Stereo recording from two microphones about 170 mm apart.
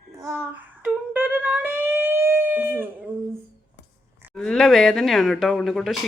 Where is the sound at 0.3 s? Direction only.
10° right (ahead or behind).